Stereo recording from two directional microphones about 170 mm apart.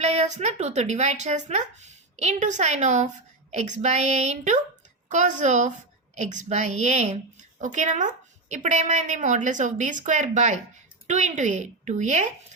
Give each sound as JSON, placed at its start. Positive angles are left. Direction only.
{"t": 0.0, "sound": "a woman's voice", "side_deg": -40}